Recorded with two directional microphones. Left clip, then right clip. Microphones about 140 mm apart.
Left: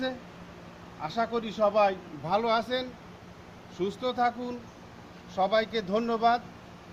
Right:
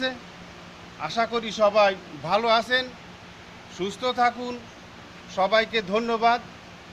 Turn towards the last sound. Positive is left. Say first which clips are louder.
# right 4 dB
turn(degrees=-10)  # may be behind; listen again after turning